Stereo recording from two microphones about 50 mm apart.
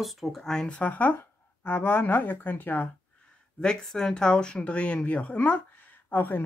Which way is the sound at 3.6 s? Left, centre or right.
Centre.